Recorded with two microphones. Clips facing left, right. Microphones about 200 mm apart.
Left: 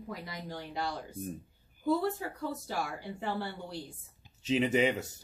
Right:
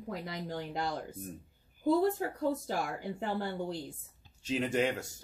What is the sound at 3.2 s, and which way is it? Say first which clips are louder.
Speech: even; 45° right (ahead or behind).